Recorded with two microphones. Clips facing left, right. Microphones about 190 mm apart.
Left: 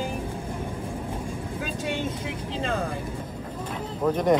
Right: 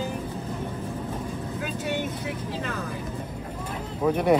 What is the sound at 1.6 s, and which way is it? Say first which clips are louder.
Speech: even; 30° left (ahead or behind).